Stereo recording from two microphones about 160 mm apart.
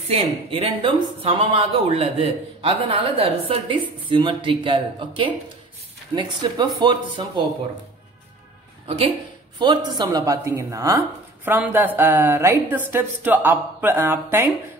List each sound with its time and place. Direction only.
0.1 s a woman's voice: 35° right (ahead or behind)
8.8 s a woman's voice: 35° right (ahead or behind); by 14.5 s 15° right (ahead or behind)